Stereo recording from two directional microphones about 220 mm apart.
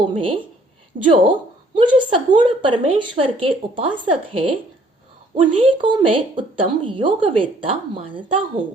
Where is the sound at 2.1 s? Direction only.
20° right (ahead or behind).